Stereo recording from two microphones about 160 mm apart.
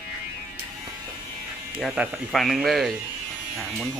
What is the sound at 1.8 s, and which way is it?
Speech, centre (ahead or behind).